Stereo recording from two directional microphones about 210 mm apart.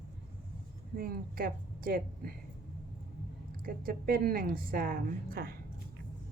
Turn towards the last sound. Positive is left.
turn(degrees=-45)  # may be behind; listen again after turning